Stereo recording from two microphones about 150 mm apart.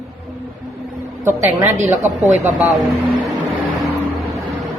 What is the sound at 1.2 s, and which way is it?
A woman's voice, 20° right (ahead or behind).